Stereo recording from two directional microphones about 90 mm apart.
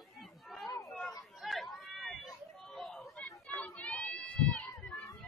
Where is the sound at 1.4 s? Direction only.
Centre (ahead or behind).